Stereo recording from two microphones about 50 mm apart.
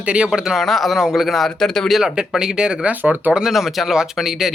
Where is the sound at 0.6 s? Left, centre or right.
Centre.